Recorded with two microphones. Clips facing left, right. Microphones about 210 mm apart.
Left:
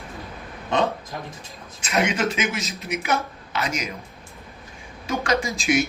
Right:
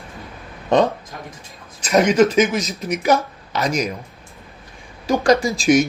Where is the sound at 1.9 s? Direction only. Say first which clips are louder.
Right 9 dB; 45° right (ahead or behind).